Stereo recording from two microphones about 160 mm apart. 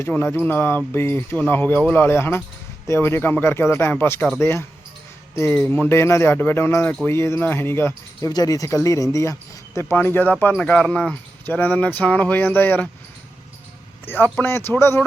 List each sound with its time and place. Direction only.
0.0 s speech: 15° left (ahead or behind)
14.0 s a man's voice: 10° left (ahead or behind)